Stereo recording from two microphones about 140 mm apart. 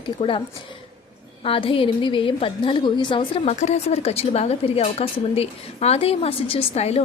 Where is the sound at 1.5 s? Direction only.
40° left (ahead or behind).